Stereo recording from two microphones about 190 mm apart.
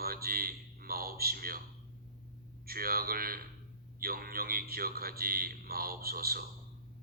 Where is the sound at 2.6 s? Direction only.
50° right (ahead or behind).